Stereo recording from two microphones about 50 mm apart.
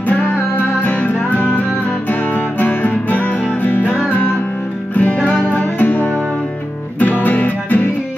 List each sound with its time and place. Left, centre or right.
0.2 s music: left
5.5 s guitar: left
7.0 s music: left